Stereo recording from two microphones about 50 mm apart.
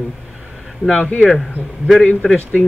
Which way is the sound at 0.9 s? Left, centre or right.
Left.